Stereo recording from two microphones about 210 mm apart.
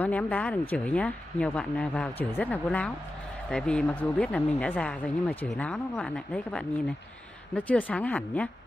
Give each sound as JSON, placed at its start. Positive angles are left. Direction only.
{"t": 0.0, "sound": "speech", "side_deg": 5}